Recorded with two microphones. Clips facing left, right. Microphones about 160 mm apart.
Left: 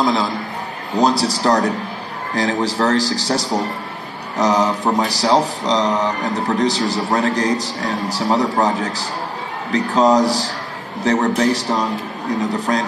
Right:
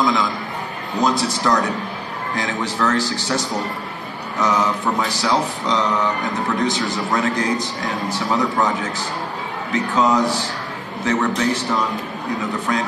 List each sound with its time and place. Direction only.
0.0 s a man's voice: 35° left (ahead or behind)
0.9 s music: 35° left (ahead or behind)